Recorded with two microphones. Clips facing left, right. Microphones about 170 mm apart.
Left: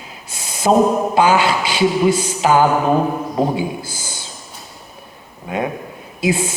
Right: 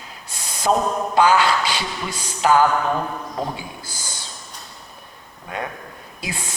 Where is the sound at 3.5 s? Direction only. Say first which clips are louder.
Left 12 dB; 10° left (ahead or behind).